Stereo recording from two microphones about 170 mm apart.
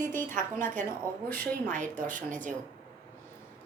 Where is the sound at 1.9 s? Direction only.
50° right (ahead or behind).